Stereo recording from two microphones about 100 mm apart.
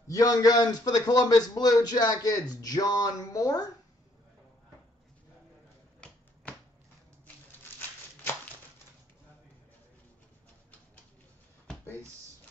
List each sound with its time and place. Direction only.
0.1 s a man's voice: 35° left (ahead or behind)